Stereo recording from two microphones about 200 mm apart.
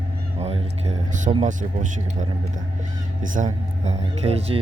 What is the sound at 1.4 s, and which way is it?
Speech, 40° right (ahead or behind).